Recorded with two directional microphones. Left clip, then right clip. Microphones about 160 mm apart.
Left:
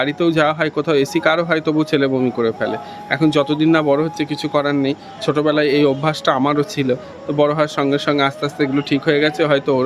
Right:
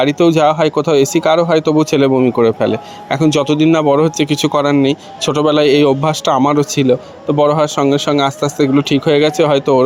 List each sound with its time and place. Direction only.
0.0 s speech: 30° right (ahead or behind)